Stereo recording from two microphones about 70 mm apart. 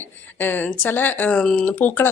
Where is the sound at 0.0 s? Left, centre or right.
Left.